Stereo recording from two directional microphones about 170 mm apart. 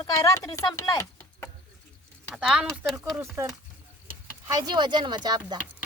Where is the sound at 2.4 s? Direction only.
Centre (ahead or behind).